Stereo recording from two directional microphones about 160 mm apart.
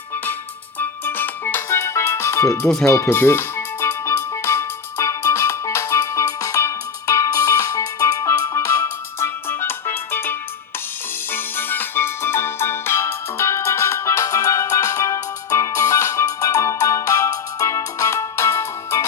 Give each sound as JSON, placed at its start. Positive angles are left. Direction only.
{"t": 0.8, "sound": "music", "side_deg": 10}